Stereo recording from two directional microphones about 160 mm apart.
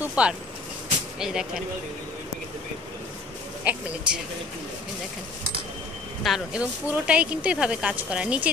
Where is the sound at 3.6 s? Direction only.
10° right (ahead or behind).